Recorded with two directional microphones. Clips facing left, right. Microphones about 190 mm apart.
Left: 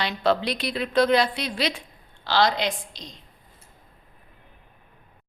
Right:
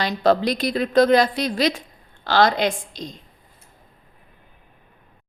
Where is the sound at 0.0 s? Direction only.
45° right (ahead or behind).